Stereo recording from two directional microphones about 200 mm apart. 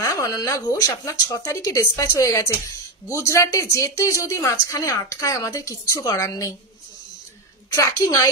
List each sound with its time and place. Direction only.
0.0 s speech: 15° left (ahead or behind)
7.7 s speech: 15° left (ahead or behind)